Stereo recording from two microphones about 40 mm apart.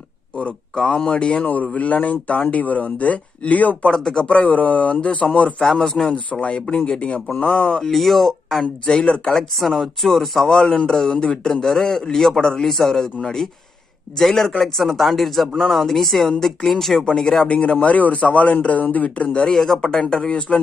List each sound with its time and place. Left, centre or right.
0.4 s speech: left
1.4 s speech: left
4.0 s speech: left
4.3 s speech: left
5.6 s a man's voice: centre
6.4 s speech: left
7.3 s speech: left
7.8 s speech: centre
8.8 s speech: left
9.6 s speech: centre
10.5 s a man's voice: centre
17.0 s a man's voice: centre
17.5 s speech: left
19.4 s a man's voice: centre